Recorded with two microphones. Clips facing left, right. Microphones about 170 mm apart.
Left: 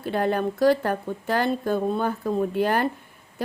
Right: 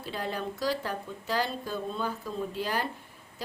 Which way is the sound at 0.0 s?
55° left (ahead or behind).